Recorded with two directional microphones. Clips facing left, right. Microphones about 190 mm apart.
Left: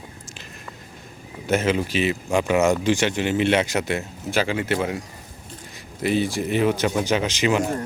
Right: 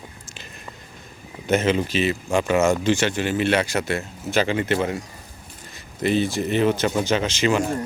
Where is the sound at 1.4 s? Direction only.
5° left (ahead or behind).